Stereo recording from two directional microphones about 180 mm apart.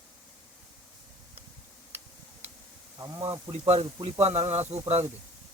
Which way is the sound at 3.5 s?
35° right (ahead or behind).